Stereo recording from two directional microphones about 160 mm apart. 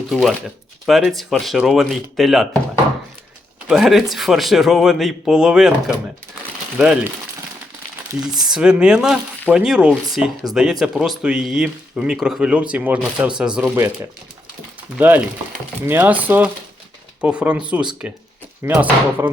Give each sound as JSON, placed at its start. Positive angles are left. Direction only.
{"t": 0.1, "sound": "speech", "side_deg": 0}
{"t": 3.7, "sound": "speech", "side_deg": 0}
{"t": 8.4, "sound": "speech", "side_deg": -5}
{"t": 13.7, "sound": "speech", "side_deg": -15}